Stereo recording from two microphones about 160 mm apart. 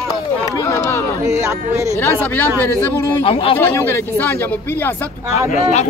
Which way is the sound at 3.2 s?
35° left (ahead or behind).